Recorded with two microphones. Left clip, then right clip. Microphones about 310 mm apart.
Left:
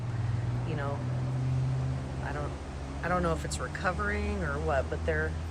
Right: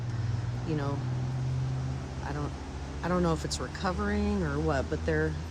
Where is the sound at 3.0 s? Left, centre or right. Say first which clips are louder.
Even; centre.